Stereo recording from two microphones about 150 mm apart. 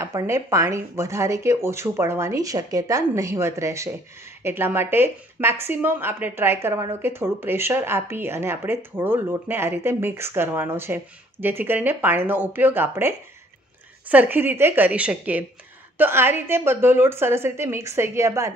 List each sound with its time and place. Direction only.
0.0 s speech: 20° right (ahead or behind)